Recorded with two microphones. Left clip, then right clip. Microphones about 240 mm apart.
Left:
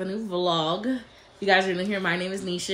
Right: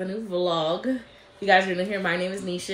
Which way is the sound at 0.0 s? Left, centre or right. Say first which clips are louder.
Even; centre.